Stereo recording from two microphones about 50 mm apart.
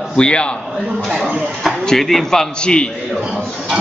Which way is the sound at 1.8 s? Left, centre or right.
Centre.